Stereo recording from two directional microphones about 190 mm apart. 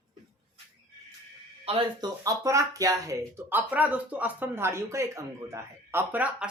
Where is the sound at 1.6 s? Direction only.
30° right (ahead or behind); by 6.5 s 10° right (ahead or behind).